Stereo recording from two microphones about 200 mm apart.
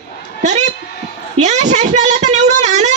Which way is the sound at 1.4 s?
35° right (ahead or behind).